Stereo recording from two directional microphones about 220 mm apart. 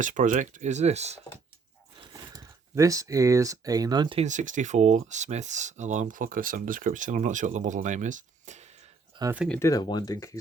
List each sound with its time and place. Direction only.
0.0 s speech: 35° right (ahead or behind)
2.0 s speech: 15° right (ahead or behind); by 8.7 s 30° right (ahead or behind)
9.3 s speech: 5° right (ahead or behind)
9.6 s speech: 15° left (ahead or behind)